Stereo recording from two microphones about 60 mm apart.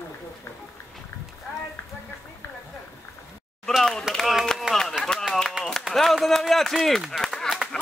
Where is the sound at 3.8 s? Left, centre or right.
Centre.